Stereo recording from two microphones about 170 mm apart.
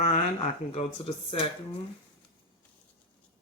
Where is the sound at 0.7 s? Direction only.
35° left (ahead or behind).